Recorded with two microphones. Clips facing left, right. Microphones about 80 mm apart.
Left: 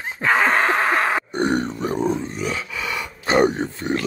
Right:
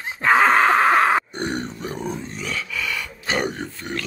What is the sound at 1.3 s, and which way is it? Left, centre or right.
Grunt, left.